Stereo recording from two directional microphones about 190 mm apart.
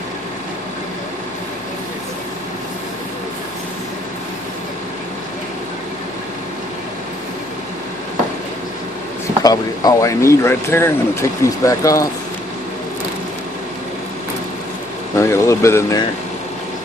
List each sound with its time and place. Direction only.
9.4 s speech: 20° left (ahead or behind)
15.1 s speech: 15° left (ahead or behind)